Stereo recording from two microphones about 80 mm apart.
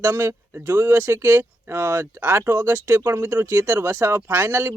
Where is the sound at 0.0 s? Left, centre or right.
Right.